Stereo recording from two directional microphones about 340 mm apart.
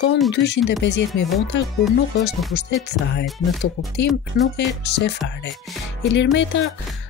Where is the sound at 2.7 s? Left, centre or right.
Left.